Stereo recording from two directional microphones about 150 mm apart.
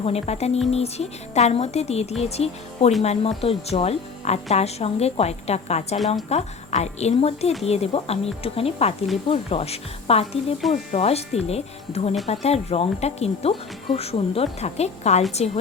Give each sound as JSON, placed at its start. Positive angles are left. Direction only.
{"t": 0.0, "sound": "a woman's voice", "side_deg": 45}